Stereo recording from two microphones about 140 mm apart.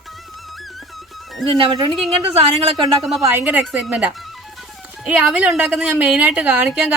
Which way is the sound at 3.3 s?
15° right (ahead or behind).